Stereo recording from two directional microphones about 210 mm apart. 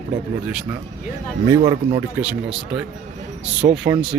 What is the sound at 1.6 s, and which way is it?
Speech, 20° right (ahead or behind).